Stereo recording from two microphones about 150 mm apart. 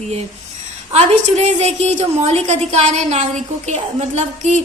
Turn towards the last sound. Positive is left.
turn(degrees=-50)  # may be behind; listen again after turning